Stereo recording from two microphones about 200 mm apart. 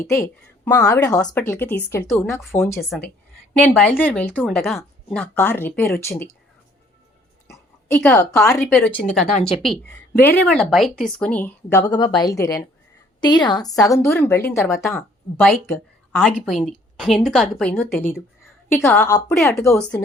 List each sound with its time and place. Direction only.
0.1 s speech: 15° left (ahead or behind)
1.2 s speech: 5° left (ahead or behind)
7.9 s a woman's voice: 10° left (ahead or behind)